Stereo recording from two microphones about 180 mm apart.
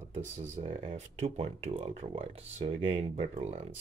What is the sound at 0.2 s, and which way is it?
Speech, 35° right (ahead or behind).